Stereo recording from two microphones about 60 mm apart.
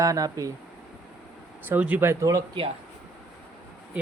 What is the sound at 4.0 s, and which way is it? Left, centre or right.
Speech, right.